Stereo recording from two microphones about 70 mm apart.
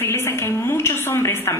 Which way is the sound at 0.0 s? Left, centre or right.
Left.